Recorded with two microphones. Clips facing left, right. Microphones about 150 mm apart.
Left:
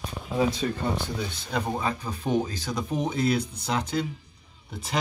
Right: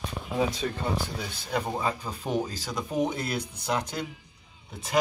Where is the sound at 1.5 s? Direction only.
15° right (ahead or behind).